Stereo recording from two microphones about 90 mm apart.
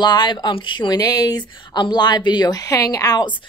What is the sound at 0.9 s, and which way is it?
Speech, 45° left (ahead or behind).